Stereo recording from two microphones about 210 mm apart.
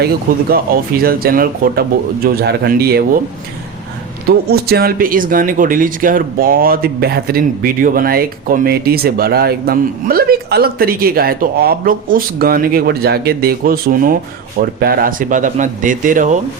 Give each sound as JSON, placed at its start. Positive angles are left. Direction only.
{"t": 0.0, "sound": "speech", "side_deg": -45}
{"t": 4.3, "sound": "speech", "side_deg": -45}